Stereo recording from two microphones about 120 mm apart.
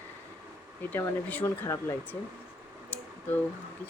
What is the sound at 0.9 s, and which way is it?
Speech, 15° left (ahead or behind).